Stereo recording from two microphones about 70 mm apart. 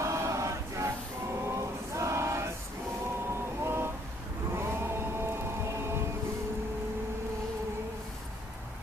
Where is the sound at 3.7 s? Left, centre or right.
Right.